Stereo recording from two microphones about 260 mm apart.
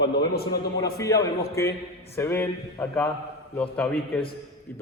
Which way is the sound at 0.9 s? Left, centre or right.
Centre.